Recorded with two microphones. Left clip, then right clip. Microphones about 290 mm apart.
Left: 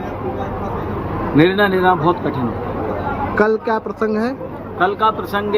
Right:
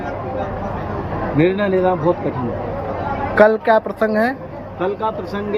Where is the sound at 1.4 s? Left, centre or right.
Left.